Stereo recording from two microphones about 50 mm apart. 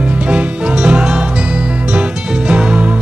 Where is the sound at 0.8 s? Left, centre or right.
Centre.